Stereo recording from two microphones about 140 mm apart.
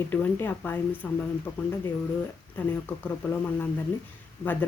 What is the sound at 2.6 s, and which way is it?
Speech, 15° left (ahead or behind).